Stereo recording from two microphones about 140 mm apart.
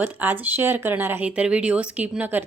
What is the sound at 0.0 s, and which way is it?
Speech, 10° right (ahead or behind).